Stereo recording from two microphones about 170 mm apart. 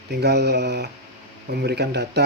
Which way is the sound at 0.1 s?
75° right (ahead or behind).